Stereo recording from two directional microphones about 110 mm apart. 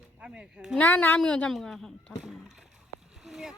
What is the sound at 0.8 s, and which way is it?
A woman's voice, 15° left (ahead or behind).